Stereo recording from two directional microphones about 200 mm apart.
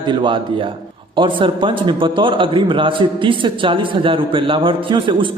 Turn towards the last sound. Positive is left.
turn(degrees=-25)  # may be behind; listen again after turning